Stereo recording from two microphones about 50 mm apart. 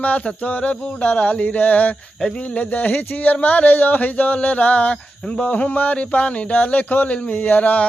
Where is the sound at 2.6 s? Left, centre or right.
Left.